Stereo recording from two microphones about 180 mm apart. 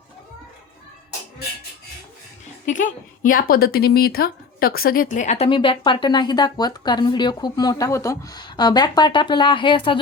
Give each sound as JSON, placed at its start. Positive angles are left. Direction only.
{"t": 2.6, "sound": "a woman's voice", "side_deg": 45}